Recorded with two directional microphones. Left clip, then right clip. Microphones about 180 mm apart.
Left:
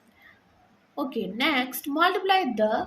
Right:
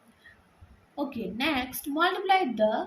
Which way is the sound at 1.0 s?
45° left (ahead or behind).